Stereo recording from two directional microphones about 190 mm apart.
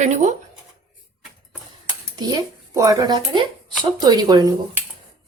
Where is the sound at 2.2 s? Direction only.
20° right (ahead or behind).